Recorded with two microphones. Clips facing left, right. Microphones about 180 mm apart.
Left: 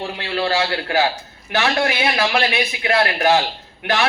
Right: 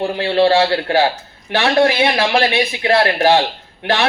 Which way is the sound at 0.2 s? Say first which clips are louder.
Right 8 dB; 30° right (ahead or behind).